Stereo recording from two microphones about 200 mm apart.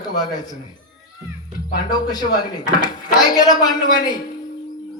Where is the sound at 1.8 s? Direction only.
20° left (ahead or behind).